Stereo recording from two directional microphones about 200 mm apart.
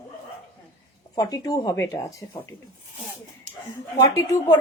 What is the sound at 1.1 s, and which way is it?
A woman's voice, 20° left (ahead or behind).